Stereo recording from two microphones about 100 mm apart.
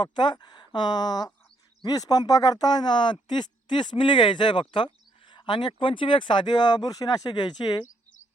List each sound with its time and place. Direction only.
0.0 s speech: 50° left (ahead or behind)